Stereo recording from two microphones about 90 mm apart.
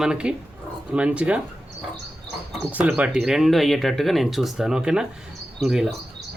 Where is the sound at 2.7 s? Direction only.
15° right (ahead or behind).